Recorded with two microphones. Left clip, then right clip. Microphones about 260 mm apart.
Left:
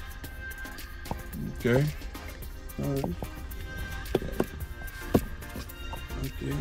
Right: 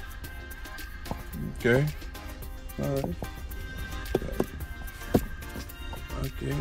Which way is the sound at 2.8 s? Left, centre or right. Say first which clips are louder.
Right 2 dB; centre.